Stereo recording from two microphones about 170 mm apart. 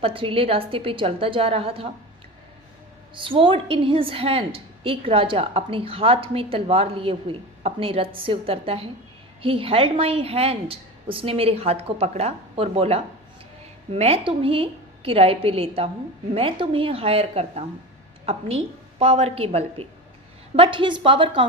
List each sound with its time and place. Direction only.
0.0 s a woman's voice: 30° right (ahead or behind)
3.2 s a woman's voice: 30° right (ahead or behind)